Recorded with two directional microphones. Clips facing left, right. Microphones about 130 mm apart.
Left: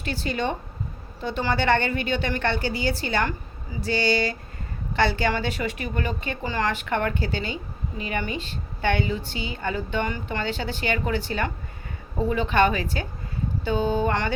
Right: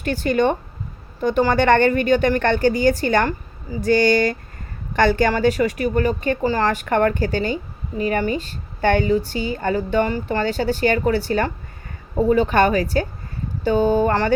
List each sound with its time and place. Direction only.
0.0 s a woman's voice: 50° right (ahead or behind)